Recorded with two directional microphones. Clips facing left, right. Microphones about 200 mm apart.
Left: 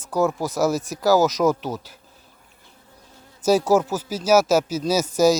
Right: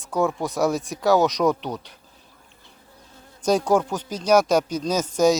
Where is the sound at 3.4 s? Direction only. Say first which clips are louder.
Left 2 dB; 5° left (ahead or behind).